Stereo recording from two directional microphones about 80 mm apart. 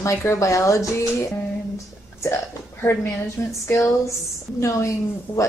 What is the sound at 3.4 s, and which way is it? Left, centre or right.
Speech, left.